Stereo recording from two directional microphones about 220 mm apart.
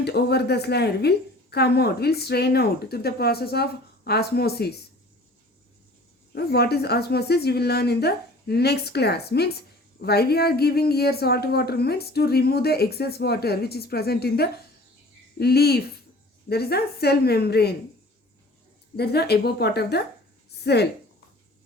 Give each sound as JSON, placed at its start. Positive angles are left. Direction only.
{"t": 0.0, "sound": "a woman's voice", "side_deg": 50}
{"t": 6.3, "sound": "a woman's voice", "side_deg": 45}
{"t": 18.9, "sound": "a woman's voice", "side_deg": 45}